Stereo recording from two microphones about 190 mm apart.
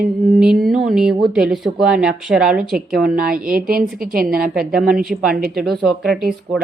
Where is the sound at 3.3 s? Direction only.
50° right (ahead or behind).